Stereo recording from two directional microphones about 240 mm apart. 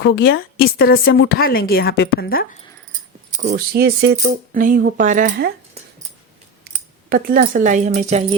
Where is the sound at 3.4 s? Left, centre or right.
Right.